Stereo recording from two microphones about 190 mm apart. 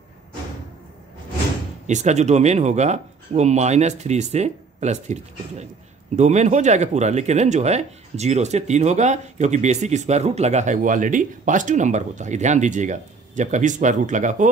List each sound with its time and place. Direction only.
1.9 s speech: 40° right (ahead or behind)